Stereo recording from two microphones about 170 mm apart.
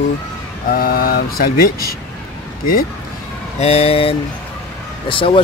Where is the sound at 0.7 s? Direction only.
60° left (ahead or behind).